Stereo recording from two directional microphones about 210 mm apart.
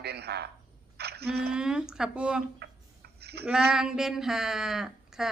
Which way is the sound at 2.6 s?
50° right (ahead or behind).